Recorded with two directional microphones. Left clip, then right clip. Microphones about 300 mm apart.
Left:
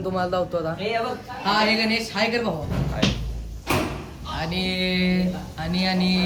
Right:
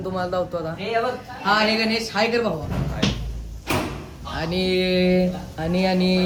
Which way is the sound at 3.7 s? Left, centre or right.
Centre.